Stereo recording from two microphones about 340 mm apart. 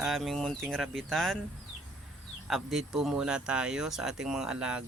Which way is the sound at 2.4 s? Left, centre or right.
Centre.